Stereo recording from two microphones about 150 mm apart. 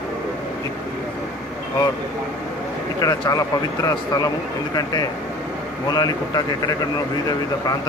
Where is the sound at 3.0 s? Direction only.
25° left (ahead or behind).